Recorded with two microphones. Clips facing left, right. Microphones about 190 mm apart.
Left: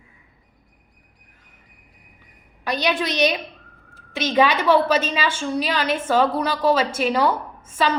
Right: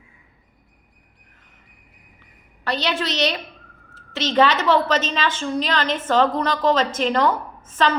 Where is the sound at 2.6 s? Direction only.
15° left (ahead or behind).